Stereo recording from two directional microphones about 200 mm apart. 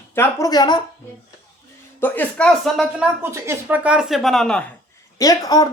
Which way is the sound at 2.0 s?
10° left (ahead or behind).